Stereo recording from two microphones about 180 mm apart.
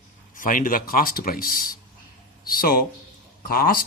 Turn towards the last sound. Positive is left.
turn(degrees=55)  # may be behind; listen again after turning